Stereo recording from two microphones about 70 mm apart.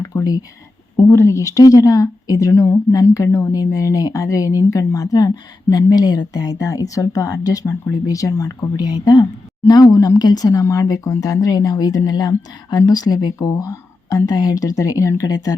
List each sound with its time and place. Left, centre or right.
0.0 s speech: left
0.9 s speech: left
3.5 s speech: left
5.7 s speech: left
8.7 s speech: left